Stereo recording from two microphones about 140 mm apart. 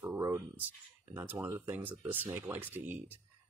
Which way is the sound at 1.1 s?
10° right (ahead or behind).